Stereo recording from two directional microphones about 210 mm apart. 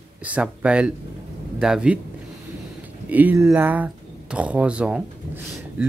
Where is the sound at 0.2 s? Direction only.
5° right (ahead or behind).